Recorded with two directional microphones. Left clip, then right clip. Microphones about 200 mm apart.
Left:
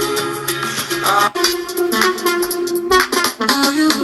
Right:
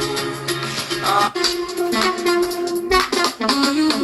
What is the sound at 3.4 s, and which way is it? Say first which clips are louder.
Music: left 3 dB; 35° left (ahead or behind).